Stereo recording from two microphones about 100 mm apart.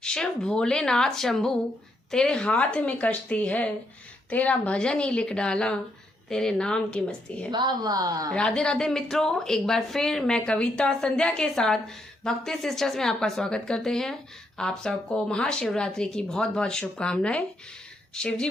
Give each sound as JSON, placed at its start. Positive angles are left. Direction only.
{"t": 0.0, "sound": "a woman's voice", "side_deg": 5}
{"t": 7.5, "sound": "a woman's voice", "side_deg": -45}
{"t": 8.3, "sound": "a woman's voice", "side_deg": 10}